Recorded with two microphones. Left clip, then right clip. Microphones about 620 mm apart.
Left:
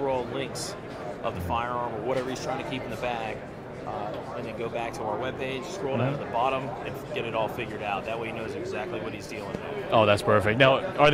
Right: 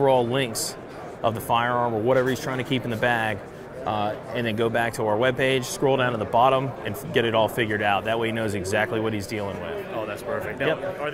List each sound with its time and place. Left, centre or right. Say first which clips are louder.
0.0 s speech: right 8 dB; right
4.6 s speech: right 8 dB; right
9.9 s a man's voice: left 11 dB; left